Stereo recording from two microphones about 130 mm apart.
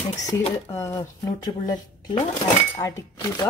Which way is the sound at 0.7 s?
25° left (ahead or behind).